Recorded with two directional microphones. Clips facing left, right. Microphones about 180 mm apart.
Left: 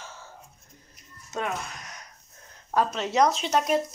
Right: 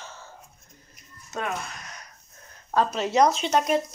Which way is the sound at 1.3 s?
20° left (ahead or behind).